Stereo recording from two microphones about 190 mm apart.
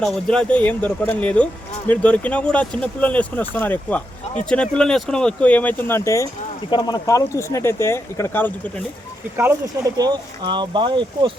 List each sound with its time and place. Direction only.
0.0 s speech: 5° left (ahead or behind)
10.0 s speech: 25° right (ahead or behind)